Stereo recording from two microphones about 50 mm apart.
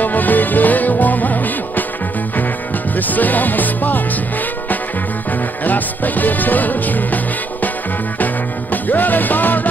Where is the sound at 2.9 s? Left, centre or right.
Left.